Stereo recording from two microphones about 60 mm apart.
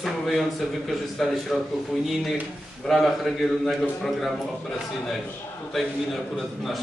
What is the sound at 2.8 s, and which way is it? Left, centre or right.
A man's voice, centre.